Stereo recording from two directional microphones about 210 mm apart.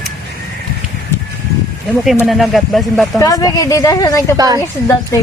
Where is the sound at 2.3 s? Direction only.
Centre (ahead or behind).